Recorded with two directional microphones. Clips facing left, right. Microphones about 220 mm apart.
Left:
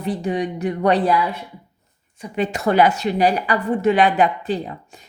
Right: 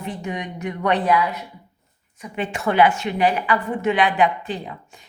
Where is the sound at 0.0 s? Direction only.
35° left (ahead or behind).